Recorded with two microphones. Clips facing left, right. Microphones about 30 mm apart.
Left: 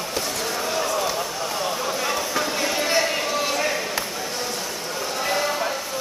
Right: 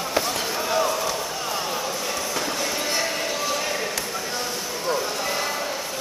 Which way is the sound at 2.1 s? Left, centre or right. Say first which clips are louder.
Left 3 dB; centre.